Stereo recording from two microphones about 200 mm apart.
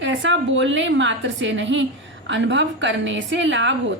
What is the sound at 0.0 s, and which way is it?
A woman's voice, 65° right (ahead or behind).